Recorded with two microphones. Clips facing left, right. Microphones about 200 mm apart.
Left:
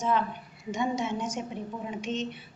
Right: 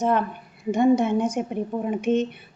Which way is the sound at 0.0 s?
55° right (ahead or behind).